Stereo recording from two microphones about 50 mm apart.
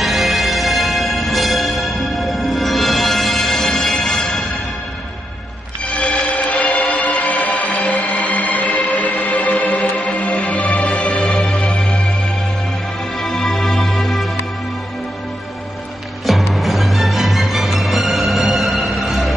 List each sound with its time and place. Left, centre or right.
0.0 s music: centre
5.9 s music: left
6.7 s music: centre
7.2 s music: left
7.7 s music: centre
8.5 s music: left
9.5 s music: centre
10.2 s music: left
11.1 s music: centre
13.2 s music: centre
16.5 s music: centre